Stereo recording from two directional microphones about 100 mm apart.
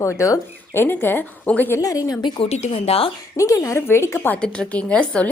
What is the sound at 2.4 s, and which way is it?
Speech, 85° left.